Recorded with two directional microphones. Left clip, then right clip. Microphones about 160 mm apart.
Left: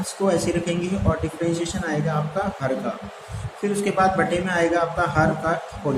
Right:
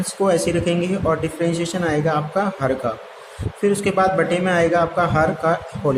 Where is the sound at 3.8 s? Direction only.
40° right (ahead or behind).